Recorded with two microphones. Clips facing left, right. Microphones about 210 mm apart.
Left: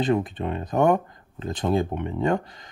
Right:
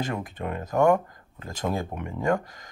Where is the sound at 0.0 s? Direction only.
20° left (ahead or behind).